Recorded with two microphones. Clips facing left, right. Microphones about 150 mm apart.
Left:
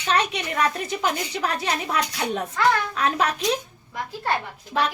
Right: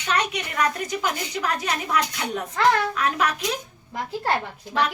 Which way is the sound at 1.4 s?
30° left (ahead or behind).